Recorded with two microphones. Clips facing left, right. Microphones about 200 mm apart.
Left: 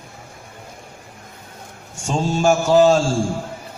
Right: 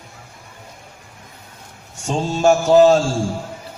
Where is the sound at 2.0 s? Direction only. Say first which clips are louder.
Right 1 dB; 35° right (ahead or behind).